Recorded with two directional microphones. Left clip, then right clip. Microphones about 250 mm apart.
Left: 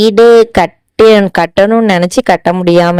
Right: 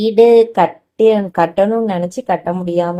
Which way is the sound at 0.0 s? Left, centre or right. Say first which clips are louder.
Left 5 dB; left.